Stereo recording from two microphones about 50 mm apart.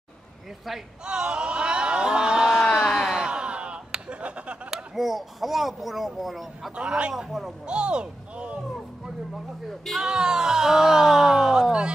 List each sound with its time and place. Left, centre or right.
0.7 s speech: centre
1.0 s a sound: centre
2.6 s a sound: centre; by 4.6 s right
4.6 s speech: centre
6.7 s speech: right; by 7.5 s centre
7.6 s speech: centre
9.7 s speech: centre
10.0 s speech: centre